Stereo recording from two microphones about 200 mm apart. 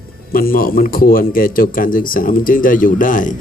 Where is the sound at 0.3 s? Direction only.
45° left (ahead or behind).